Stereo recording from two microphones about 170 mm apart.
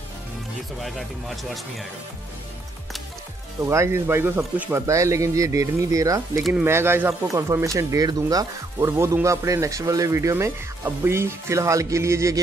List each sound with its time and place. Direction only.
0.7 s speech: centre (ahead or behind)
3.6 s speech: 15° right (ahead or behind)